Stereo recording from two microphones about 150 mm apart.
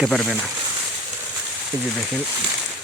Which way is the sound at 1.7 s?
20° right (ahead or behind).